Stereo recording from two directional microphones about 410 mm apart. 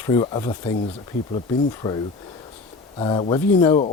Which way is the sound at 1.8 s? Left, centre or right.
Centre.